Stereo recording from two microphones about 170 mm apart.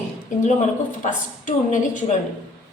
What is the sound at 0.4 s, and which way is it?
Speech, 50° left (ahead or behind).